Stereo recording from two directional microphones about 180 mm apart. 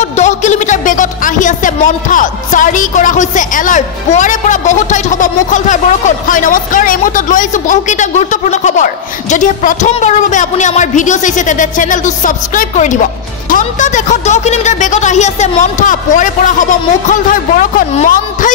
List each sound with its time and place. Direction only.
0.0 s a woman's voice: 40° left (ahead or behind)